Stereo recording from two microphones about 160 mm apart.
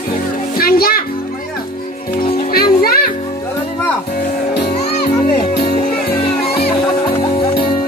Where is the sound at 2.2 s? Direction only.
70° left (ahead or behind).